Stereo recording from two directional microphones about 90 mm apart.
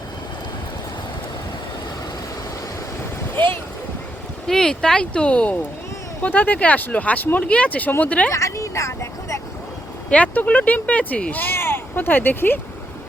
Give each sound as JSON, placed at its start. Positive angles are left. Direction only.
{"t": 3.3, "sound": "speech", "side_deg": 25}
{"t": 4.4, "sound": "speech", "side_deg": 5}
{"t": 8.3, "sound": "vehicle", "side_deg": 35}
{"t": 10.1, "sound": "speech", "side_deg": 15}